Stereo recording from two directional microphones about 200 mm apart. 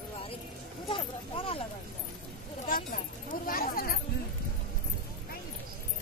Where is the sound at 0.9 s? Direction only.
25° left (ahead or behind).